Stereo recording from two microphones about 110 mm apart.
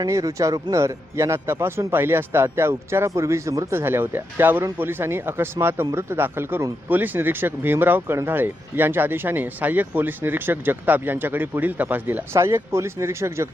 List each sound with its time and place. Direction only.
0.0 s speech: 30° right (ahead or behind)